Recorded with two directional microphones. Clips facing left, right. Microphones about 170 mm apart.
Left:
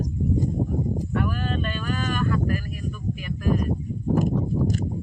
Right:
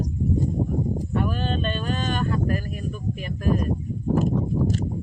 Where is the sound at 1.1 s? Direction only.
25° right (ahead or behind).